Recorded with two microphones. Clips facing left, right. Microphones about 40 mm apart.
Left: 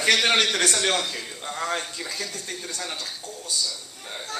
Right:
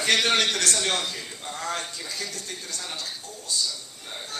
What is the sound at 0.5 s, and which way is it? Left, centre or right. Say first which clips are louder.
Speech: left 3 dB; left.